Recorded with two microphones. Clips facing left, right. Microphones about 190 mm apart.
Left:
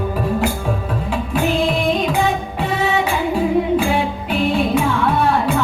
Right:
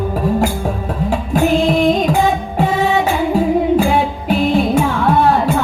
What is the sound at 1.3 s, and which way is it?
Music, 45° right (ahead or behind).